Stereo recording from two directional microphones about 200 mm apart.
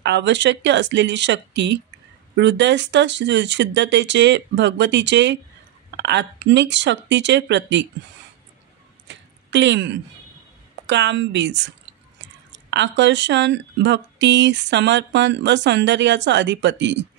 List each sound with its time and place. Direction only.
0.0 s speech: 60° right (ahead or behind)
9.0 s a sound: 60° right (ahead or behind)
10.9 s speech: 60° right (ahead or behind)